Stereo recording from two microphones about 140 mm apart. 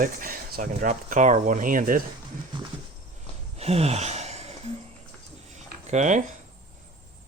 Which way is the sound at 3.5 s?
50° right (ahead or behind).